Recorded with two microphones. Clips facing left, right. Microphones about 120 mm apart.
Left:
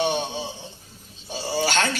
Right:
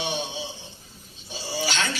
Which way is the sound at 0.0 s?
50° left (ahead or behind).